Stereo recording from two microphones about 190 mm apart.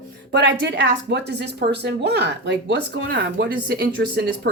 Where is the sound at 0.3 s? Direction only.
65° right (ahead or behind).